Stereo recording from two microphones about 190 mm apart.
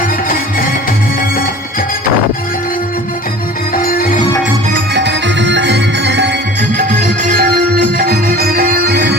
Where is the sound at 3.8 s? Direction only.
50° left (ahead or behind).